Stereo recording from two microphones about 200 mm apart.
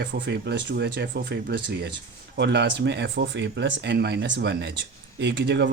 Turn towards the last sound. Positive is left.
turn(degrees=-60)  # may be behind; listen again after turning